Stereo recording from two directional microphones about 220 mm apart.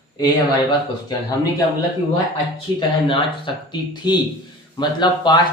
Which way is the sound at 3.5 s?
20° left (ahead or behind).